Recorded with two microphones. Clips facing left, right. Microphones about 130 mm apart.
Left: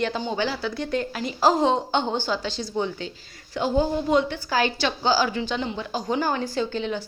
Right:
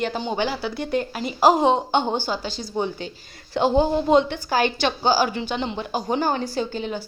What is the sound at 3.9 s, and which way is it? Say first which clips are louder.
Speech: right 4 dB; 25° right (ahead or behind).